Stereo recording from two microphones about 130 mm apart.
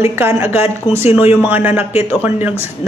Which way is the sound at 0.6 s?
50° left (ahead or behind).